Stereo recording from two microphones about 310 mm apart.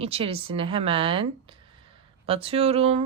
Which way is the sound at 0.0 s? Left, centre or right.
Centre.